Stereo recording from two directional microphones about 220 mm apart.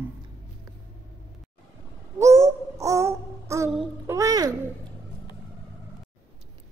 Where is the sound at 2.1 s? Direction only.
15° right (ahead or behind).